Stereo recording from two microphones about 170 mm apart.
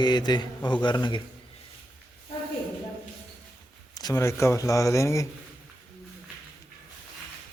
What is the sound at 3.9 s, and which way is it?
A man's voice, 20° left (ahead or behind).